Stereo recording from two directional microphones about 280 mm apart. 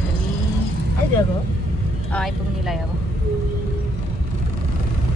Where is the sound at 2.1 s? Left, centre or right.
Centre.